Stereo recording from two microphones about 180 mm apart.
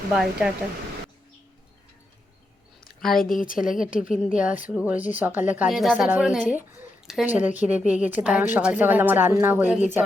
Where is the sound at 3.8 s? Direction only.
5° right (ahead or behind).